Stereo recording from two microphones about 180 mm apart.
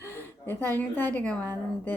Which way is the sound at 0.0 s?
10° left (ahead or behind).